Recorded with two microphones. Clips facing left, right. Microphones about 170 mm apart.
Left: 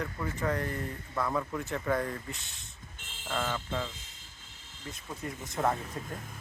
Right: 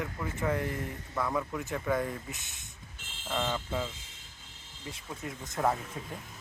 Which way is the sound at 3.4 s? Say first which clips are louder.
Right 2 dB; 15° right (ahead or behind).